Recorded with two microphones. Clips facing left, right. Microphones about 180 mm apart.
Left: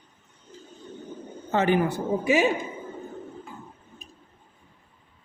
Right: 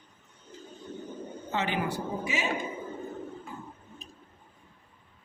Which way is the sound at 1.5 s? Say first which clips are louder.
Left 8 dB; 50° left (ahead or behind).